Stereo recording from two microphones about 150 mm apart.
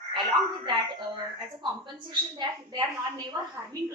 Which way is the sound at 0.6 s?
30° right (ahead or behind).